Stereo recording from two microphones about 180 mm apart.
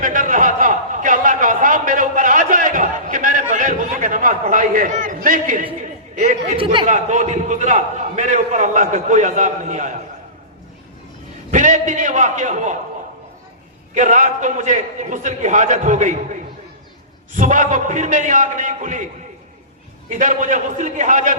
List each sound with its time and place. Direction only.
0.0 s a sound: 45° right (ahead or behind)
6.5 s a man's voice: 30° right (ahead or behind)
6.8 s a man's voice: 40° right (ahead or behind)
11.5 s a man's voice: 45° right (ahead or behind)
13.9 s a man's voice: 45° right (ahead or behind)
17.3 s a man's voice: 45° right (ahead or behind)
20.1 s a man's voice: 45° right (ahead or behind)